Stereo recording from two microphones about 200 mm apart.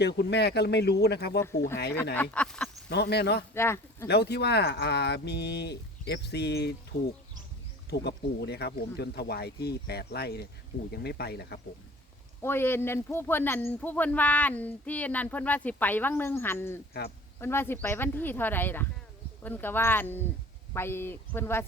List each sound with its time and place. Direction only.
0.0 s speech: 55° left (ahead or behind)
1.4 s speech: 15° left (ahead or behind)
2.9 s speech: 55° left (ahead or behind)
3.5 s speech: 10° left (ahead or behind)
4.1 s speech: 55° left (ahead or behind)
7.9 s speech: 55° left (ahead or behind)
12.4 s speech: 10° left (ahead or behind)